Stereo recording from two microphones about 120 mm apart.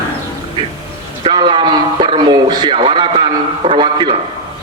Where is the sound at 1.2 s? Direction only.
45° right (ahead or behind).